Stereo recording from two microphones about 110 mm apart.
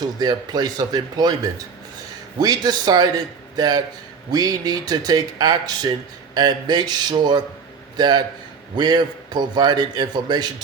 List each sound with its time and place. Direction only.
0.0 s a man's voice: 40° right (ahead or behind)